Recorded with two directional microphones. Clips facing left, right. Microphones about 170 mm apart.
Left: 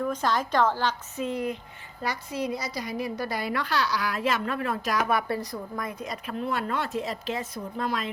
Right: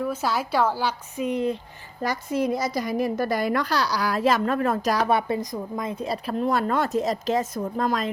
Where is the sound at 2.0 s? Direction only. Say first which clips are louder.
Right 6 dB; 50° right (ahead or behind).